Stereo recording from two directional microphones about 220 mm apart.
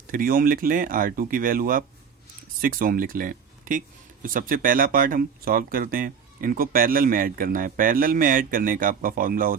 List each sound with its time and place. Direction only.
0.1 s speech: 40° right (ahead or behind)